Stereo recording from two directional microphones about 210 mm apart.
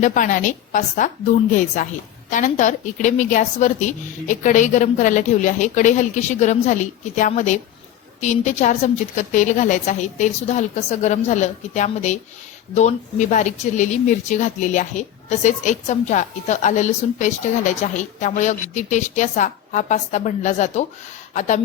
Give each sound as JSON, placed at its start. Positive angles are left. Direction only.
{"t": 0.0, "sound": "a woman's voice", "side_deg": 35}